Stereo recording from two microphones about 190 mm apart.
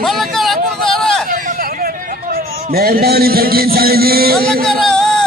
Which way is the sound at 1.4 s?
50° right (ahead or behind).